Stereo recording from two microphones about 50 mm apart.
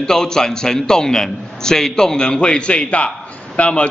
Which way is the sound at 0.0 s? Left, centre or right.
Centre.